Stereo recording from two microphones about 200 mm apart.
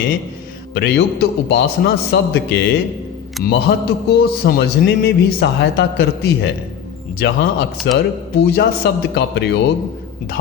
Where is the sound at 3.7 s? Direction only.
50° left (ahead or behind).